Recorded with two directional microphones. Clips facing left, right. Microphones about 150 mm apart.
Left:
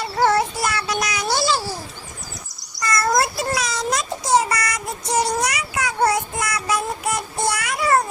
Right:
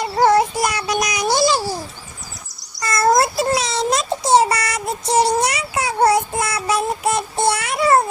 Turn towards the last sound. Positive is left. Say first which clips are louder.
# right 4 dB
turn(degrees=-25)  # may be behind; listen again after turning